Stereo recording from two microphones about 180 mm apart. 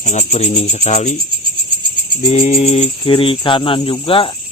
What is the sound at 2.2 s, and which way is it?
Speech, 30° left (ahead or behind).